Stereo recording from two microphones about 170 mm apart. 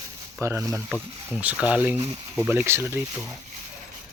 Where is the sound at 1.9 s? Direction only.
20° right (ahead or behind).